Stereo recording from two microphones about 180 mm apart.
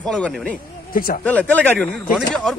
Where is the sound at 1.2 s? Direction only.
10° left (ahead or behind).